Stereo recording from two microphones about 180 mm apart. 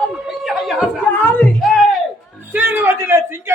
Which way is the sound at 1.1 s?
10° left (ahead or behind).